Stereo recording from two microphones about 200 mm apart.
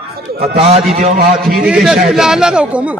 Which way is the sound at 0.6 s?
30° right (ahead or behind).